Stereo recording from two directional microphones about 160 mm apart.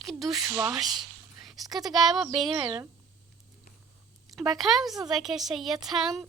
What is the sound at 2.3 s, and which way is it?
Speech, 30° right (ahead or behind).